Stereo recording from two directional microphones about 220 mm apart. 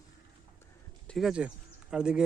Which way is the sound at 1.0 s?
Centre (ahead or behind).